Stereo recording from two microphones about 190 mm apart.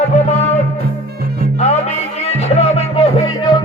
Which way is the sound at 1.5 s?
35° left (ahead or behind).